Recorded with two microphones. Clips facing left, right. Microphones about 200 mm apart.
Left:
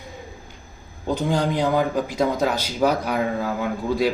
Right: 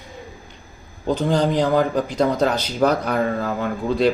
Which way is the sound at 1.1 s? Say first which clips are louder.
Right 3 dB; 10° left (ahead or behind).